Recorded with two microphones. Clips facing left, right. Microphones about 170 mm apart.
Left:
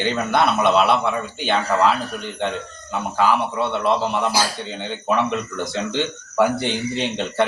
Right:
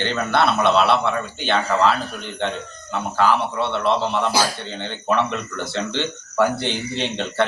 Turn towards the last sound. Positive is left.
turn(degrees=10)  # may be behind; listen again after turning